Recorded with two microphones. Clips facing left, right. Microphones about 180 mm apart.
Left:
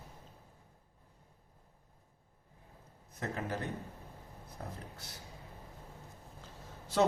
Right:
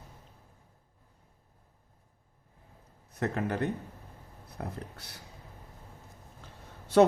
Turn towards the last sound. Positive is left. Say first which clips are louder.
# right 8 dB
turn(degrees=-60)  # may be behind; listen again after turning